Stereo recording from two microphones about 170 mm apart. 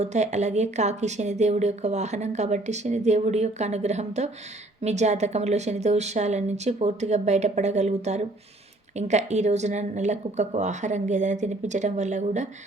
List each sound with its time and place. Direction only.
0.0 s speech: 40° right (ahead or behind)